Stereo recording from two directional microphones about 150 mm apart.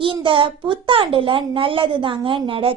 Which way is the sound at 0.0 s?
35° right (ahead or behind).